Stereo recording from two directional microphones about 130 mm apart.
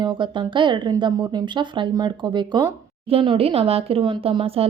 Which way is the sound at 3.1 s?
45° right (ahead or behind).